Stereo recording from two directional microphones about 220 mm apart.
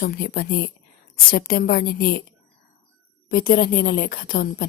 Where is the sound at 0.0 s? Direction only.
45° left (ahead or behind).